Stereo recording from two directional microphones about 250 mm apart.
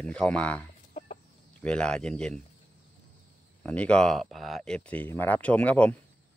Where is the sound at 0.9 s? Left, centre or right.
Left.